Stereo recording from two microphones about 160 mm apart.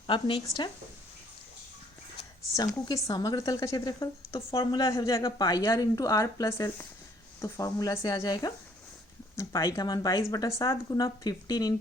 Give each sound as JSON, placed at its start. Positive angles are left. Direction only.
{"t": 0.1, "sound": "speech", "side_deg": 35}
{"t": 2.6, "sound": "speech", "side_deg": 25}